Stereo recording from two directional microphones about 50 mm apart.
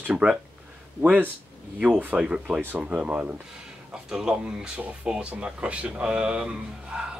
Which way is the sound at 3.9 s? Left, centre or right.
Centre.